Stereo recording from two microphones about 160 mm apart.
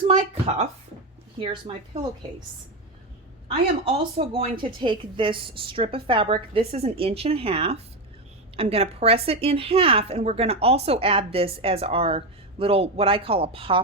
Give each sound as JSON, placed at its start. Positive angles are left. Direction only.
{"t": 0.1, "sound": "a woman's voice", "side_deg": -45}
{"t": 3.8, "sound": "a woman's voice", "side_deg": -35}